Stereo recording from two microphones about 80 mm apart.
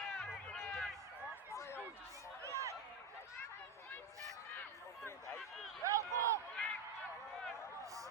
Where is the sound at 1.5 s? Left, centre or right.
Left.